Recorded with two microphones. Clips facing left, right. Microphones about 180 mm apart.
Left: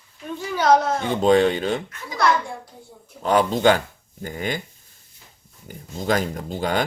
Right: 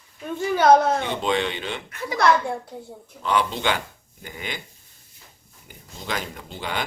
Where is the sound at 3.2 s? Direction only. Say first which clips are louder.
Left 6 dB; 45° left (ahead or behind).